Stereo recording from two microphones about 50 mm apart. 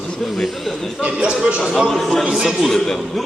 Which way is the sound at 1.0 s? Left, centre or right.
Right.